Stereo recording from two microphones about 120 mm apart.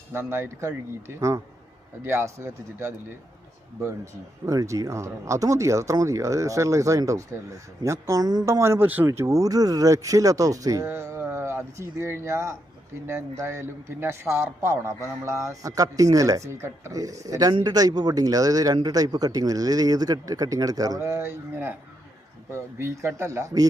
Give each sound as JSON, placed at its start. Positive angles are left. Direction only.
{"t": 0.1, "sound": "speech", "side_deg": -20}
{"t": 4.4, "sound": "speech", "side_deg": -25}